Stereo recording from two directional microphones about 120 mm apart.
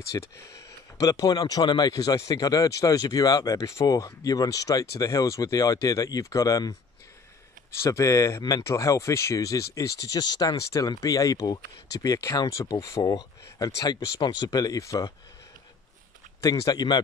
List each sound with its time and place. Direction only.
0.1 s speech: 25° left (ahead or behind)
7.8 s speech: 25° left (ahead or behind)
16.3 s speech: 30° left (ahead or behind)